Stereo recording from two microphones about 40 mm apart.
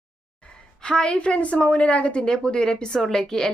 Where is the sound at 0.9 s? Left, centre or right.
Left.